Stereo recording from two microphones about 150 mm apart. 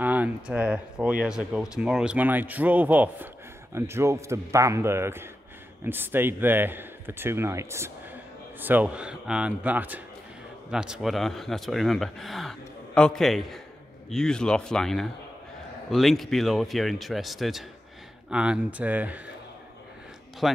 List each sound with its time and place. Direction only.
0.0 s speech: 10° right (ahead or behind)
20.4 s speech: centre (ahead or behind)